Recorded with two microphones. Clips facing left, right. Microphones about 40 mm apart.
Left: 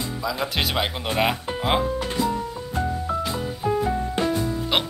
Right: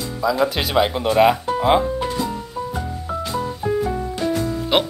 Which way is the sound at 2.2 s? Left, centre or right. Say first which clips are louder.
Even; centre.